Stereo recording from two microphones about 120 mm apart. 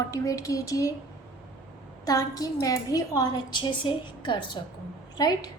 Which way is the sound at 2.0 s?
30° left (ahead or behind).